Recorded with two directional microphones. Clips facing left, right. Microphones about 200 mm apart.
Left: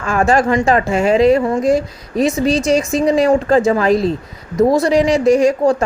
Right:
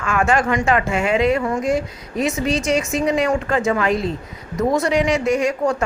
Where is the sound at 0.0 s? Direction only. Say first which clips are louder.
Left 4 dB; 35° left (ahead or behind).